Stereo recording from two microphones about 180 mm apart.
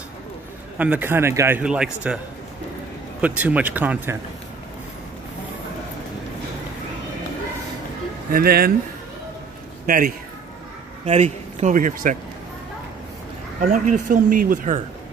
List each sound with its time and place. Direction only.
0.7 s a man's voice: 10° right (ahead or behind)
3.2 s a man's voice: 10° right (ahead or behind)
8.3 s speech: 55° right (ahead or behind)
9.8 s speech: 50° right (ahead or behind)
11.1 s speech: 40° right (ahead or behind)
13.6 s speech: 45° right (ahead or behind)